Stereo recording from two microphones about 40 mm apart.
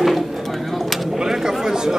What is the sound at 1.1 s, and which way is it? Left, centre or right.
Chatter, centre.